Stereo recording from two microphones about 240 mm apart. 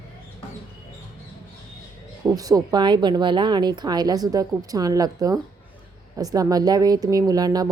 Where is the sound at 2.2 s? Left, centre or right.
Centre.